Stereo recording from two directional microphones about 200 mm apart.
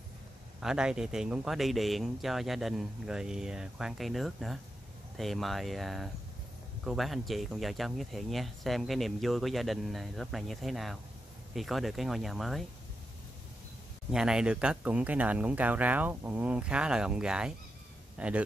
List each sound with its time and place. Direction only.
0.6 s speech: 5° right (ahead or behind)
14.1 s speech: 5° right (ahead or behind)